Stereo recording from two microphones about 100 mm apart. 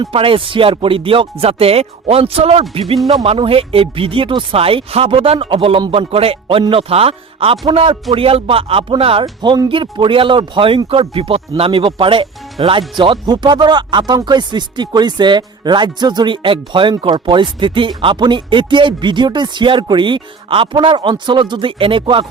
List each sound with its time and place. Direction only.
0.1 s speech: 65° right (ahead or behind); by 2.8 s 85° right
3.2 s speech: 65° right (ahead or behind)
9.6 s speech: 60° right (ahead or behind)
13.0 s speech: 45° right (ahead or behind)